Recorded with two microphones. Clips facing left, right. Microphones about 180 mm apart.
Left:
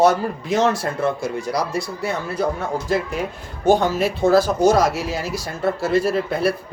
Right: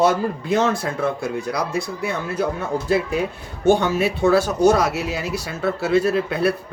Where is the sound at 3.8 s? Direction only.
70° right (ahead or behind).